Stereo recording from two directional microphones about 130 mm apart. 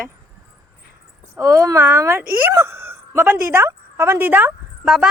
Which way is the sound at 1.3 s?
20° right (ahead or behind).